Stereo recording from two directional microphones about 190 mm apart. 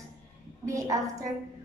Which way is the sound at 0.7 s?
15° right (ahead or behind).